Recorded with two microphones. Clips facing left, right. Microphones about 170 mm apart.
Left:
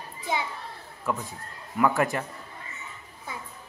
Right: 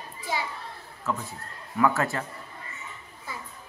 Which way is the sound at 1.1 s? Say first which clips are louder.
Left 1 dB; 15° left (ahead or behind).